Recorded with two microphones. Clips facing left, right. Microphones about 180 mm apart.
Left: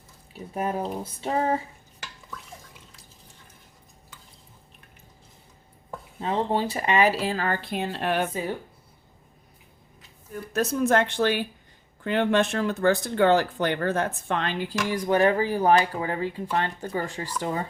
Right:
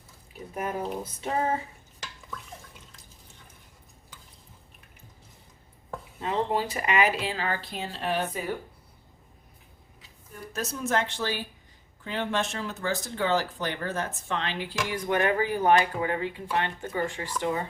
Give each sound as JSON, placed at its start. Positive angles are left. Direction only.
{"t": 0.5, "sound": "speech", "side_deg": 30}
{"t": 6.2, "sound": "speech", "side_deg": 30}
{"t": 8.3, "sound": "speech", "side_deg": 25}
{"t": 10.5, "sound": "a woman's voice", "side_deg": 60}